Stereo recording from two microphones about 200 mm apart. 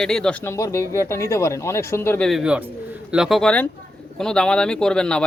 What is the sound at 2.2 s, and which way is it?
Speech, 5° right (ahead or behind).